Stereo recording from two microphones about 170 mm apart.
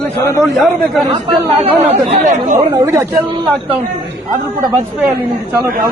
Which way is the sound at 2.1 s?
50° right (ahead or behind).